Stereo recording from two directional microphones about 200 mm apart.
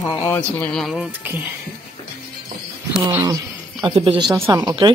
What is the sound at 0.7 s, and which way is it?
Speech, centre (ahead or behind).